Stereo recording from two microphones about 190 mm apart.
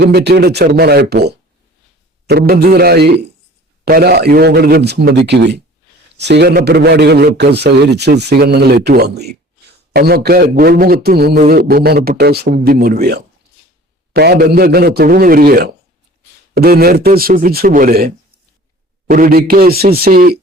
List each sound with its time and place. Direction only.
0.0 s speech: 60° right (ahead or behind)